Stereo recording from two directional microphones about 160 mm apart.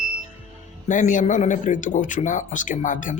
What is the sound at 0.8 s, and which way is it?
Speech, 55° left (ahead or behind).